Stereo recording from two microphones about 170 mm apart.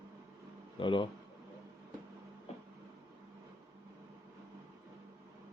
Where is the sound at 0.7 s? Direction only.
30° left (ahead or behind).